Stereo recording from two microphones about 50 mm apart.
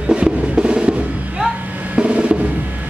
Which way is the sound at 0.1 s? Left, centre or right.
Right.